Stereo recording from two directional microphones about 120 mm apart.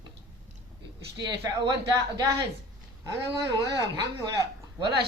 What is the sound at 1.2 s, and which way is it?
Speech, 40° right (ahead or behind).